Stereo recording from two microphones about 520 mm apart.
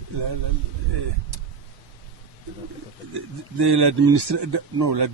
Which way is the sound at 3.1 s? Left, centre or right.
Right.